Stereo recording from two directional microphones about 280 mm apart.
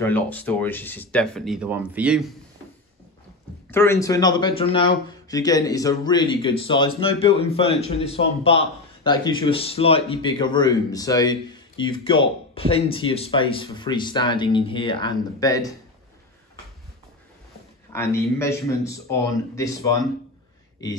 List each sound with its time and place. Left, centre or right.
0.0 s speech: centre
3.7 s a man's voice: centre
17.9 s speech: centre